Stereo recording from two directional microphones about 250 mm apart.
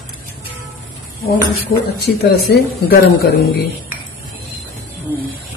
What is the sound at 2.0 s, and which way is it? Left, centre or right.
Speech, left.